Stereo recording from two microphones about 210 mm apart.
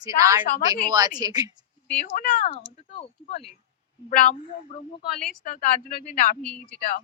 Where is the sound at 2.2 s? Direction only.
40° left (ahead or behind).